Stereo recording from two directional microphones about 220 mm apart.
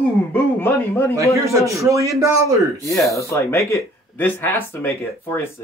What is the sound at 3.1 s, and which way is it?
Speech, 10° left (ahead or behind).